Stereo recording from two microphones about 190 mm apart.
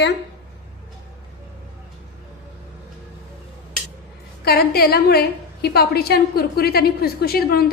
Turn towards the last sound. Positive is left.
turn(degrees=55)  # may be behind; listen again after turning